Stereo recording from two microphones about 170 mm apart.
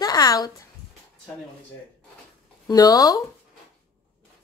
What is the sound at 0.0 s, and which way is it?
Speech, 20° left (ahead or behind).